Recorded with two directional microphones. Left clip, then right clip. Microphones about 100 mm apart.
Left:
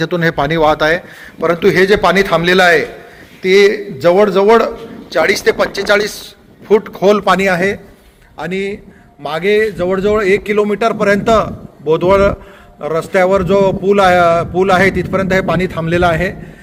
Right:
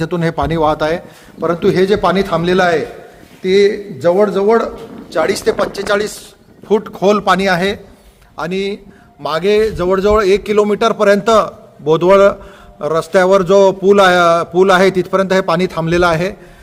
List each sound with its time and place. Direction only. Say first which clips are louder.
0.0 s a man's voice: left 3 dB; 20° right (ahead or behind); by 4.7 s centre (ahead or behind)
5.1 s a man's voice: left 2 dB; 20° right (ahead or behind)
6.7 s a man's voice: left 2 dB; 30° right (ahead or behind)
7.3 s a man's voice: left 1 dB; centre (ahead or behind)
8.4 s a man's voice: right 1 dB; 45° right (ahead or behind)
10.9 s a man's voice: right 2 dB; 15° right (ahead or behind)
13.3 s a man's voice: right 2 dB; 35° right (ahead or behind)